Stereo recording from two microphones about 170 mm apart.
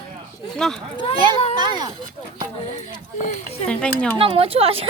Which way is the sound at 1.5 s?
25° right (ahead or behind).